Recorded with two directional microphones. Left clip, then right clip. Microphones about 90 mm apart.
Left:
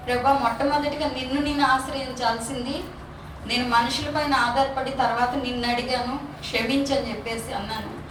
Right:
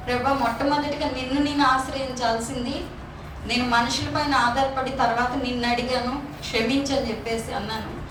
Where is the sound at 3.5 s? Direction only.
45° right (ahead or behind).